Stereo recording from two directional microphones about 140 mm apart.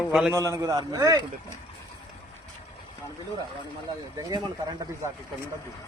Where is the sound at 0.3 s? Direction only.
25° right (ahead or behind).